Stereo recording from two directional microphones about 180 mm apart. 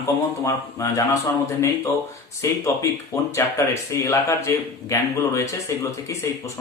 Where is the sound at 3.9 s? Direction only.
15° left (ahead or behind).